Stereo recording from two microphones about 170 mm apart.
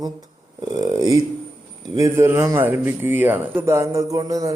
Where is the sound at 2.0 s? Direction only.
15° right (ahead or behind).